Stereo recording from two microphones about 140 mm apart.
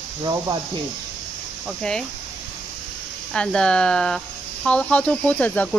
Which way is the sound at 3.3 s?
5° left (ahead or behind).